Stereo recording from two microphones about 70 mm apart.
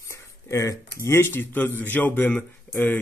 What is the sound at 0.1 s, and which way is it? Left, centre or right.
Speech, left.